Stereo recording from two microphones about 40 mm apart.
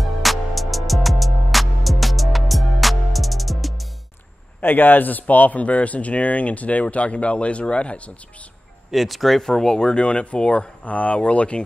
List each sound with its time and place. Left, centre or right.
0.0 s music: centre
4.6 s a man's voice: left
8.9 s speech: centre
9.4 s speech: centre; by 11.6 s left